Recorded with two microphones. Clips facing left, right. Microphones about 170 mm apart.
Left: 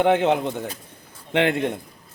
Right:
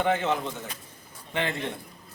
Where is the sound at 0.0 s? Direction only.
65° left (ahead or behind).